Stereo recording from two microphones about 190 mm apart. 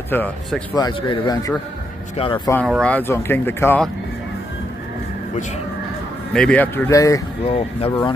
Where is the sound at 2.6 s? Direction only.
5° left (ahead or behind).